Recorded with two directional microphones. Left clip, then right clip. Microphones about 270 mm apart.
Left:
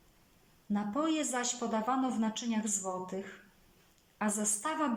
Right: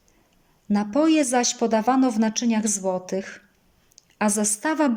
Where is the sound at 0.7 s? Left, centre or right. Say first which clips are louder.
Right 13 dB; right.